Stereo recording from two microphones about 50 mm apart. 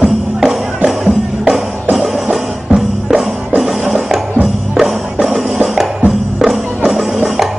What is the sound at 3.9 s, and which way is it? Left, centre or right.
Music, centre.